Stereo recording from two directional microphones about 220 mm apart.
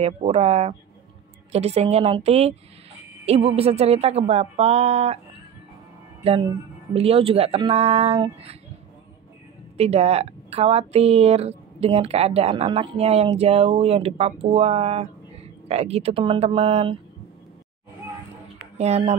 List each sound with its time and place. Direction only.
0.0 s a woman's voice: 30° right (ahead or behind)
6.2 s a woman's voice: 25° right (ahead or behind)
9.8 s a woman's voice: 30° right (ahead or behind)
18.8 s a woman's voice: 30° right (ahead or behind)